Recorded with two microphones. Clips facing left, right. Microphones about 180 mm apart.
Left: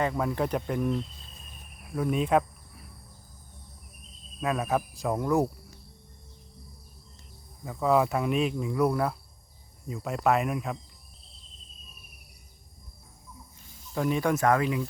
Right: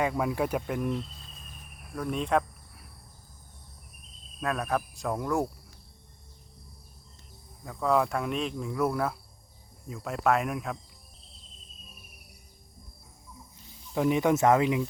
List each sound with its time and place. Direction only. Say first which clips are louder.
0.0 s speech: even; 5° right (ahead or behind)
2.0 s speech: left 3 dB; 5° left (ahead or behind)
4.4 s speech: left 2 dB; 5° left (ahead or behind)
7.6 s speech: left 2 dB; 5° left (ahead or behind)
13.9 s speech: right 2 dB; 20° right (ahead or behind)